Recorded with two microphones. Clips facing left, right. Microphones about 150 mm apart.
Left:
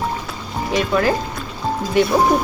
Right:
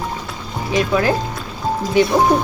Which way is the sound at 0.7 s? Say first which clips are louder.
Right 1 dB; centre (ahead or behind).